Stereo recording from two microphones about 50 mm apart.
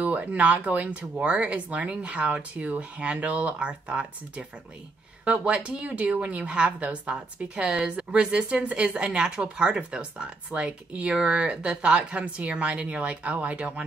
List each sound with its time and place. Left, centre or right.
0.0 s a woman's voice: right